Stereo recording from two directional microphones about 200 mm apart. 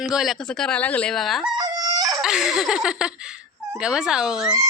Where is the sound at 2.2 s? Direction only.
5° right (ahead or behind).